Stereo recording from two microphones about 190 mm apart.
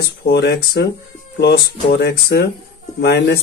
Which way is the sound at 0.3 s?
60° left (ahead or behind).